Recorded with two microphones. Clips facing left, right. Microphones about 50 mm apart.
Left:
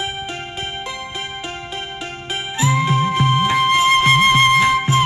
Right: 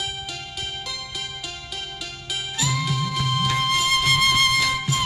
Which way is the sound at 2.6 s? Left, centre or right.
Left.